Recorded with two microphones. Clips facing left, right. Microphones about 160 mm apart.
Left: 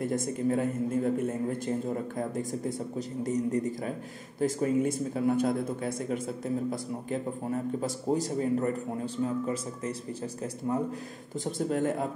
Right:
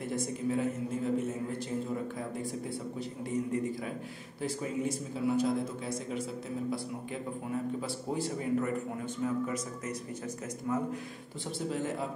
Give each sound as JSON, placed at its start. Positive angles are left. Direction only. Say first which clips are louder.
{"t": 0.0, "sound": "a man's voice", "louder": "left 5 dB", "side_deg": 45}
{"t": 3.0, "sound": "a man's voice", "louder": "left 5 dB", "side_deg": 40}
{"t": 11.4, "sound": "a man's voice", "louder": "left 6 dB", "side_deg": 50}